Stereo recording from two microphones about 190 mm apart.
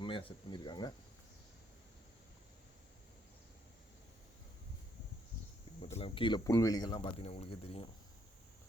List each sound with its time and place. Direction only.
0.0 s speech: 25° left (ahead or behind)
5.8 s speech: 35° left (ahead or behind)